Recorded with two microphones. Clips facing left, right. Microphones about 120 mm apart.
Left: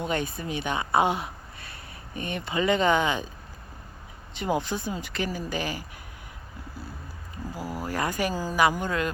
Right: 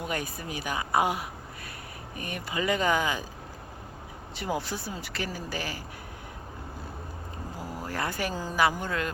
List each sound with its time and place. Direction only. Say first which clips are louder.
0.0 s a woman's voice: left 4 dB; 25° left (ahead or behind)
4.4 s speech: left 4 dB; 20° left (ahead or behind)
7.8 s speech: left 4 dB; 15° left (ahead or behind)